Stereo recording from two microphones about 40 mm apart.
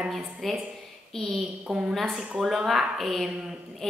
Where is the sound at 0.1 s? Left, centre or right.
Centre.